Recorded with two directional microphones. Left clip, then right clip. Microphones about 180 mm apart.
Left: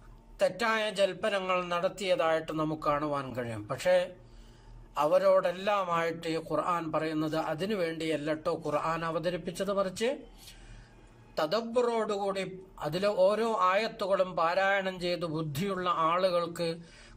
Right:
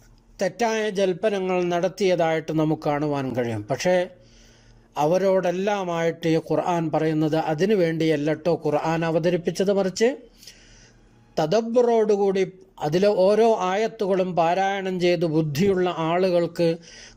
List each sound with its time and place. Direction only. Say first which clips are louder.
0.3 s a man's voice: right 5 dB; 35° right (ahead or behind)
11.3 s a man's voice: right 9 dB; 35° right (ahead or behind)